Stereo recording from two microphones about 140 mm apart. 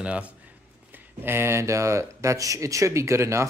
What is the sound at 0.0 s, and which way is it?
Speech, 10° right (ahead or behind).